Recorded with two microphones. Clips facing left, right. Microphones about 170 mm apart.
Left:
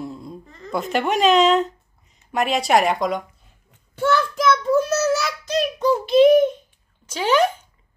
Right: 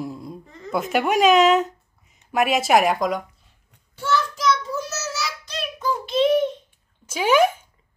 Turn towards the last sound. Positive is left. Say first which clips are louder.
# right 1 dB
turn(degrees=-10)  # may be behind; listen again after turning